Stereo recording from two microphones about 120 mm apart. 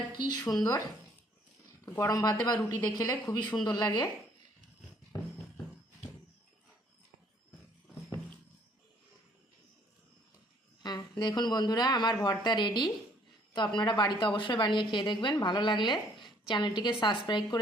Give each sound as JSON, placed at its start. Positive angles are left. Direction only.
{"t": 0.1, "sound": "a woman's voice", "side_deg": 35}
{"t": 1.8, "sound": "a woman's voice", "side_deg": 20}
{"t": 11.2, "sound": "a woman's voice", "side_deg": 35}